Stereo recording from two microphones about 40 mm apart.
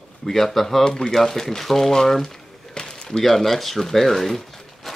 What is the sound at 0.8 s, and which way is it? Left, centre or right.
Speech, centre.